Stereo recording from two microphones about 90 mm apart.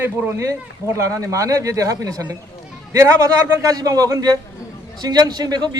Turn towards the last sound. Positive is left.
turn(degrees=-50)  # may be behind; listen again after turning